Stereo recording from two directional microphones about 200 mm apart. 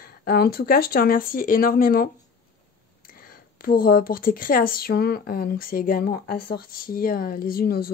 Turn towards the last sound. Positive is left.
turn(degrees=50)  # may be behind; listen again after turning